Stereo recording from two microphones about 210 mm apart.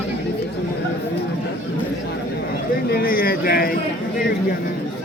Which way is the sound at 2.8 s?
45° left (ahead or behind).